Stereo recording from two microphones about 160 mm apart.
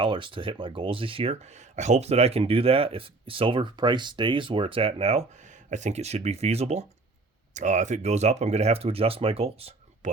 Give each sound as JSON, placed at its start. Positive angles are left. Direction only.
{"t": 0.0, "sound": "speech", "side_deg": -30}